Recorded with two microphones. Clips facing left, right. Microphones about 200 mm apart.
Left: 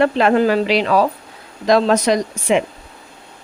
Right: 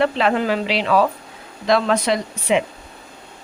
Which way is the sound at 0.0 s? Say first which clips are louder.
Left 4 dB; 45° left (ahead or behind).